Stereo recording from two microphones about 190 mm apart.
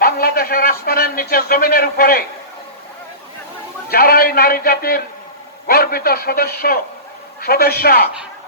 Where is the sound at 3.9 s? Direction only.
50° left (ahead or behind).